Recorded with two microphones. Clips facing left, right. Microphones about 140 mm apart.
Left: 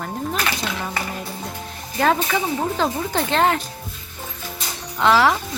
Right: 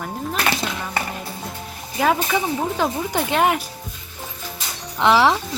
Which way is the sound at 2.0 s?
10° right (ahead or behind).